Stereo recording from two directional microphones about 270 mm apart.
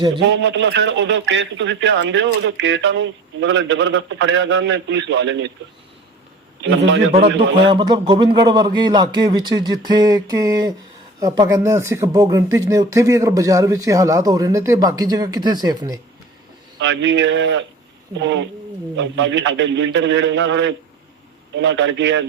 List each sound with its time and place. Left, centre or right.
0.2 s a man's voice: right
6.7 s a man's voice: right
7.6 s speech: centre
16.8 s a man's voice: right